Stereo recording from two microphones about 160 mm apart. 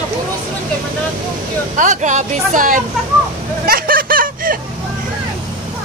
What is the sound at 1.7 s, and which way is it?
Speech, 50° right (ahead or behind).